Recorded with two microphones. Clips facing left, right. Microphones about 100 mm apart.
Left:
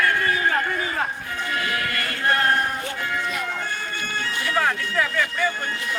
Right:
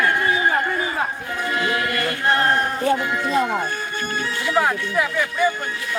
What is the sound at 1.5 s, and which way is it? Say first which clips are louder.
Chant: right 4 dB; 25° right (ahead or behind).